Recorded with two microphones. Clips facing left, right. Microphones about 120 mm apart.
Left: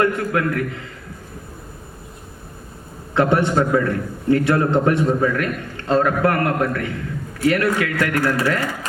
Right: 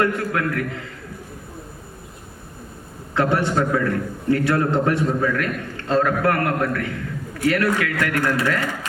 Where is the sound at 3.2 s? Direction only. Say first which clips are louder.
Left 3 dB; 20° left (ahead or behind).